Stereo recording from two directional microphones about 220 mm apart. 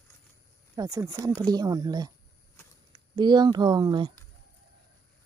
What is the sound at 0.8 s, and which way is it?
Speech, 15° right (ahead or behind).